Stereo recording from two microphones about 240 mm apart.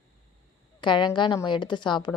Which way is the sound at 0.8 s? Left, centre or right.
Centre.